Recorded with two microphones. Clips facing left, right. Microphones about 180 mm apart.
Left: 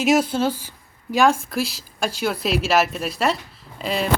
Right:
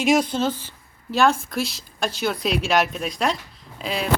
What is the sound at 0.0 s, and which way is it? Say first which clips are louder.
A woman's voice: left 1 dB; 5° left (ahead or behind).